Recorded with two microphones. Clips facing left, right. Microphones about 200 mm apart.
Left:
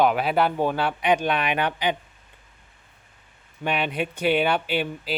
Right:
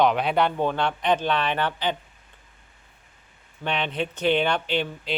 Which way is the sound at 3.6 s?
10° left (ahead or behind).